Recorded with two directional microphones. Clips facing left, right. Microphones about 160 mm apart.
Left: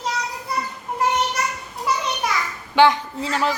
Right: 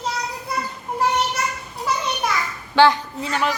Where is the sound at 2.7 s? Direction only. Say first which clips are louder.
Even; 20° left (ahead or behind).